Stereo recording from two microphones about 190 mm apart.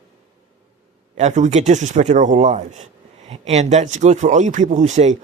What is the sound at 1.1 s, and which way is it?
Speech, 40° right (ahead or behind).